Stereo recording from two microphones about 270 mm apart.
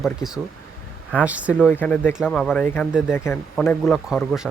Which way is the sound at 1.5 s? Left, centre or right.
Centre.